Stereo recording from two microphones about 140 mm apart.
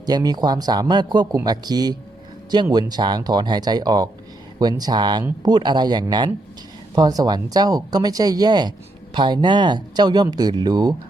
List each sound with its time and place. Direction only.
0.0 s speech: 30° right (ahead or behind)